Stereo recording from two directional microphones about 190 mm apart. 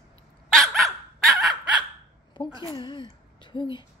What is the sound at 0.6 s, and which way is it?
Dog, centre (ahead or behind).